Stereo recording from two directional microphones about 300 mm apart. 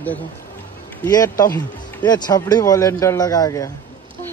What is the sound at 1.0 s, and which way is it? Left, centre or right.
Speech, centre.